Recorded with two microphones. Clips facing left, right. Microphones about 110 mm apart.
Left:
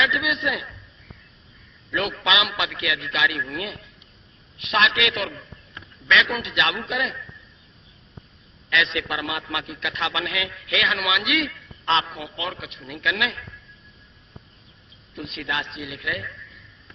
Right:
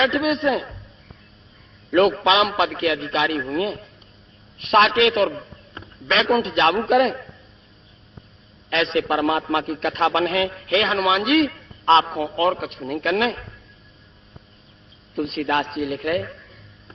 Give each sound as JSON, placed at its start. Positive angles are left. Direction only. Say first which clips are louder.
{"t": 0.0, "sound": "a man's voice", "louder": "right 5 dB", "side_deg": -40}
{"t": 1.9, "sound": "a man's voice", "louder": "right 8 dB", "side_deg": -45}
{"t": 8.7, "sound": "a man's voice", "louder": "right 5 dB", "side_deg": -35}
{"t": 12.4, "sound": "a man's voice", "louder": "right 12 dB", "side_deg": -45}
{"t": 15.1, "sound": "a man's voice", "louder": "right 8 dB", "side_deg": -40}